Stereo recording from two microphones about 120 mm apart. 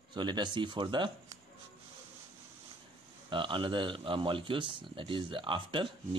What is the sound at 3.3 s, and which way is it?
Speech, 45° right (ahead or behind).